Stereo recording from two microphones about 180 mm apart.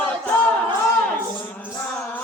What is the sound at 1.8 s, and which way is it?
Music, 5° left (ahead or behind).